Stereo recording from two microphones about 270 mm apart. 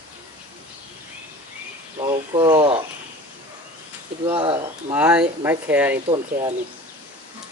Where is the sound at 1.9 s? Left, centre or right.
Centre.